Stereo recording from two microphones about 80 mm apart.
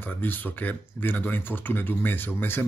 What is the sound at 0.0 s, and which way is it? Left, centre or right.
Speech, left.